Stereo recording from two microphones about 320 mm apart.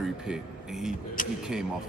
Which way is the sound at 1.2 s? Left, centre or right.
Left.